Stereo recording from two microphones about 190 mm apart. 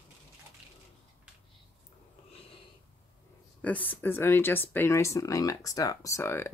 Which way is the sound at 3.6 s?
10° left (ahead or behind).